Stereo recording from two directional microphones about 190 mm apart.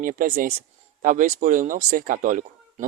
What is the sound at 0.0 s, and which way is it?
Speech, 45° right (ahead or behind).